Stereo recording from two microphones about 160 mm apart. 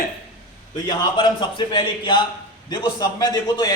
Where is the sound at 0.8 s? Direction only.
30° left (ahead or behind).